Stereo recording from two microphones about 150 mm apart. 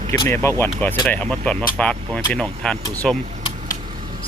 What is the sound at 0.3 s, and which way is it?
Speech, 15° left (ahead or behind).